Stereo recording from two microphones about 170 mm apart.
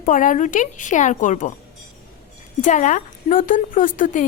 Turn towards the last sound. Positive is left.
turn(degrees=50)  # may be behind; listen again after turning